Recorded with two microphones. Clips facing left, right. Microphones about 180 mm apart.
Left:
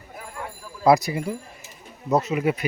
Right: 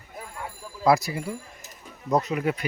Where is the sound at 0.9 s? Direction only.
20° left (ahead or behind).